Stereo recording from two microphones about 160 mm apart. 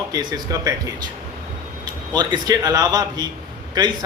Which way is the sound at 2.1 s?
25° right (ahead or behind).